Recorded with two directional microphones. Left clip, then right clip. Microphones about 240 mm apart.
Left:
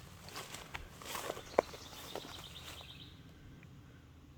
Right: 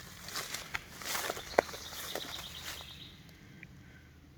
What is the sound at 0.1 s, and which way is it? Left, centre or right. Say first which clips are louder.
Walk: right 7 dB; right.